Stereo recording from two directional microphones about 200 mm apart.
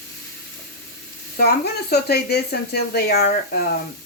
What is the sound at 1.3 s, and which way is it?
Speech, 50° left (ahead or behind).